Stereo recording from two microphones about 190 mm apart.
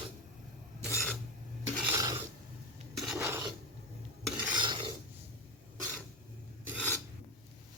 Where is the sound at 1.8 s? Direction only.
15° right (ahead or behind).